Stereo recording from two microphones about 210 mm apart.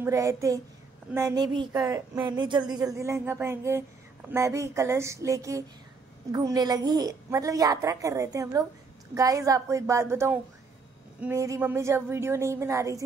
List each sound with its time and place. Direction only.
0.0 s speech: 15° right (ahead or behind)